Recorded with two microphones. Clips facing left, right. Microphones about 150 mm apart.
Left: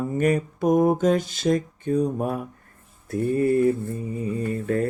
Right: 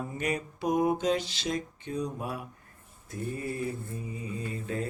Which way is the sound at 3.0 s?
60° left (ahead or behind).